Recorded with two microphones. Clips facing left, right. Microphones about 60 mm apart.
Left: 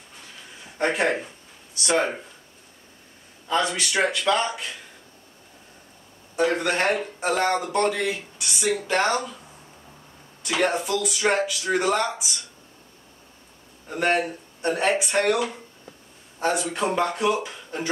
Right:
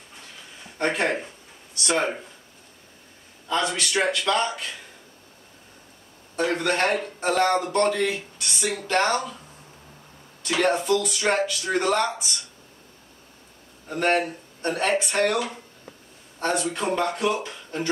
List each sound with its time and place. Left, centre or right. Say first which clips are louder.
0.7 s speech: left 1 dB; centre
1.8 s a man's voice: left 1 dB; left
3.4 s a man's voice: left 1 dB; centre
6.3 s speech: left 1 dB; centre
10.5 s speech: right 2 dB; centre
13.8 s a man's voice: even; centre